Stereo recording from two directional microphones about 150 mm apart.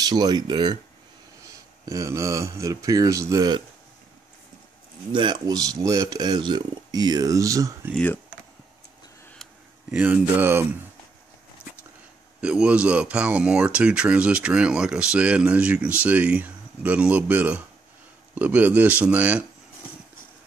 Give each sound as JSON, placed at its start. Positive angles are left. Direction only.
{"t": 0.0, "sound": "speech", "side_deg": -25}
{"t": 1.9, "sound": "speech", "side_deg": -20}
{"t": 5.1, "sound": "speech", "side_deg": -30}
{"t": 7.9, "sound": "speech", "side_deg": 10}
{"t": 9.8, "sound": "speech", "side_deg": -10}
{"t": 12.4, "sound": "speech", "side_deg": -5}